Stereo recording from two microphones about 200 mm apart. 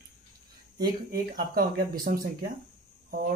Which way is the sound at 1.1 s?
50° right (ahead or behind).